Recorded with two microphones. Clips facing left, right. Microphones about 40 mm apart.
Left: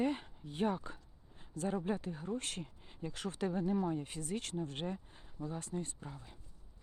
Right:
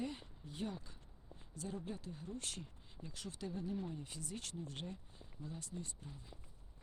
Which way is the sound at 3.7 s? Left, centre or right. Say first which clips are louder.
Left 9 dB; left.